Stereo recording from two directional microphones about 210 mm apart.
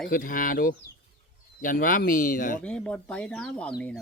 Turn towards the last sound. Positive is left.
turn(degrees=5)  # may be behind; listen again after turning